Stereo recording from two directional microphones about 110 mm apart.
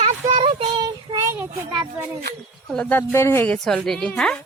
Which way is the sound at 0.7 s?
40° right (ahead or behind).